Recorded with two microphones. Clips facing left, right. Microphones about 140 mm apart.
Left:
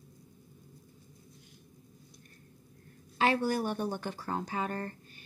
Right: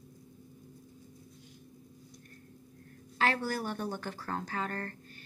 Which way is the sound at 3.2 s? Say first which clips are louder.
Left 3 dB; 15° left (ahead or behind).